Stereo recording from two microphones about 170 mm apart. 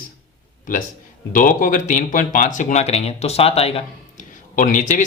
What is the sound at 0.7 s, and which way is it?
Speech, 50° left (ahead or behind).